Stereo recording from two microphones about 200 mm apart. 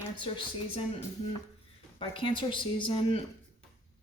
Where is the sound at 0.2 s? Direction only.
25° left (ahead or behind).